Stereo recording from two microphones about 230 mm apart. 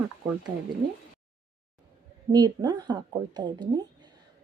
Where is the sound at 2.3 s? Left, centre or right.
Centre.